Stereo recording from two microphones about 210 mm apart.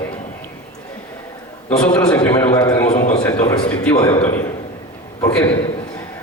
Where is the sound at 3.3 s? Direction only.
20° left (ahead or behind).